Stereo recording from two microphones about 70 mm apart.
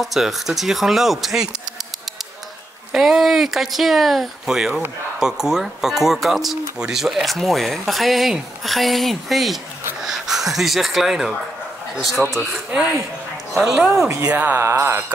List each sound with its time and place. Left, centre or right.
0.0 s speech: centre
2.9 s speech: centre
13.6 s speech: centre
13.9 s speech: right
14.2 s speech: right
14.6 s speech: right